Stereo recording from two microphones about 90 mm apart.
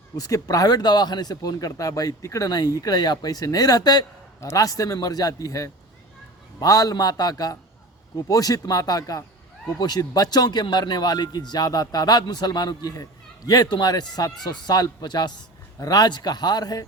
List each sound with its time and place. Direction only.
0.2 s speech: 40° left (ahead or behind)
4.4 s a man's voice: 35° left (ahead or behind)